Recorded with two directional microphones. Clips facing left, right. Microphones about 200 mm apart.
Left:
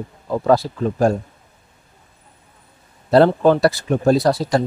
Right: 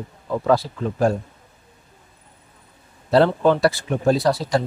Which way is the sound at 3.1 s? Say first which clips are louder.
Left 3 dB; 45° left (ahead or behind).